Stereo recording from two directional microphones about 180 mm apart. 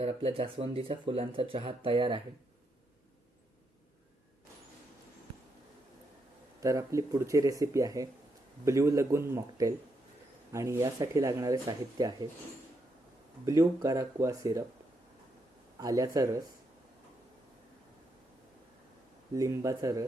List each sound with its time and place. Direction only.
0.0 s speech: 35° right (ahead or behind)
6.6 s speech: 15° right (ahead or behind)
13.4 s speech: 20° right (ahead or behind)
15.8 s speech: 20° right (ahead or behind)
19.3 s speech: 20° right (ahead or behind)